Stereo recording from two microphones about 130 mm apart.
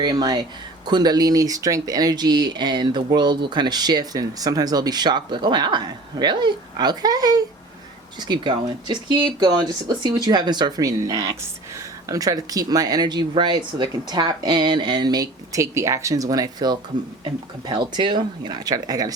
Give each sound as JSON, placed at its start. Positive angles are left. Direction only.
{"t": 0.0, "sound": "speech", "side_deg": -30}